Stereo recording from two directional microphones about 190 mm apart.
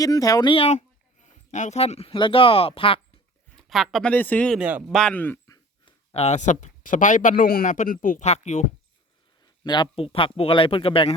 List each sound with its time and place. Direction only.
0.0 s speech: 20° left (ahead or behind)
3.7 s speech: centre (ahead or behind)
5.8 s a man's voice: 30° left (ahead or behind)
9.6 s speech: 20° left (ahead or behind)